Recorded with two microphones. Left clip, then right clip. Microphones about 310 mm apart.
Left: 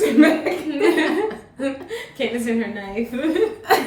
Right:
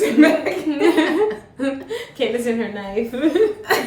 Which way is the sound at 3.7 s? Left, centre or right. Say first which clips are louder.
Left 2 dB; centre.